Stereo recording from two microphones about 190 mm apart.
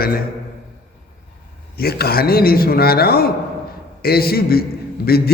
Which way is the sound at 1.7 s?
55° left (ahead or behind).